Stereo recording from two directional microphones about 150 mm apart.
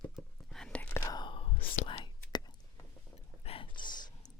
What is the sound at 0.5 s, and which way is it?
Whispering, 5° left (ahead or behind).